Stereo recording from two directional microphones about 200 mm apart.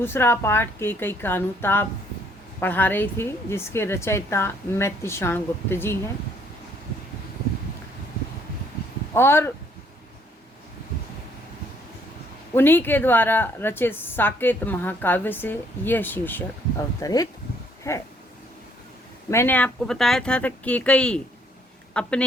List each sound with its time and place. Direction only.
0.0 s a woman's voice: 10° left (ahead or behind)
9.1 s a woman's voice: 10° left (ahead or behind)
12.5 s a woman's voice: 10° left (ahead or behind)
19.3 s speech: 10° left (ahead or behind)